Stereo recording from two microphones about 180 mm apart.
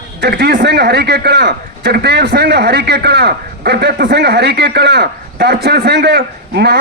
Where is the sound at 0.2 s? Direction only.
65° right (ahead or behind).